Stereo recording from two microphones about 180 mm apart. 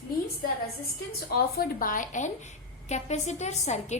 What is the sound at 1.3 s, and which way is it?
A woman's voice, 55° left (ahead or behind).